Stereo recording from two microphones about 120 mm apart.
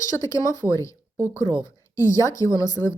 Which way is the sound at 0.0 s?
25° left (ahead or behind).